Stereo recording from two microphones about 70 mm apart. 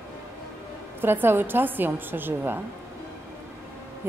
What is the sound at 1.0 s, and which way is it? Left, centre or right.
A woman's voice, right.